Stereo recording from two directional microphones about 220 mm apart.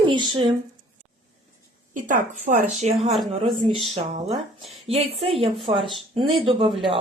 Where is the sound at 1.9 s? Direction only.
35° right (ahead or behind).